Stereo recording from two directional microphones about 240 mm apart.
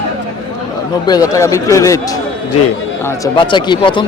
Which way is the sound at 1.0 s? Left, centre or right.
Centre.